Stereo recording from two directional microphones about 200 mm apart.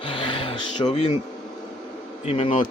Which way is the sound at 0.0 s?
25° left (ahead or behind).